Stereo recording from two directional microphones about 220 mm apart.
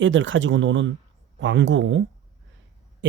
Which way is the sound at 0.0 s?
60° right (ahead or behind).